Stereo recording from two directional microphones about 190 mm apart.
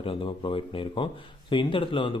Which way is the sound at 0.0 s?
25° left (ahead or behind).